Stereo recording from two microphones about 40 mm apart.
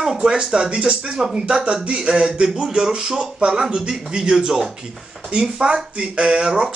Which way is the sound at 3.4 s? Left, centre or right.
Centre.